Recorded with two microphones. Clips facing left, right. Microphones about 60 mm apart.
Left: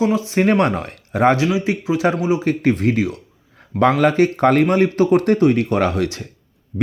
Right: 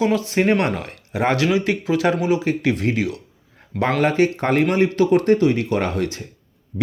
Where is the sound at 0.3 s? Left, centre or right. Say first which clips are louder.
Left 4 dB; left.